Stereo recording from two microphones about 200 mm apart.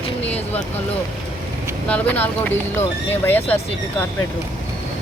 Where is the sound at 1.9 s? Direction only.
10° left (ahead or behind).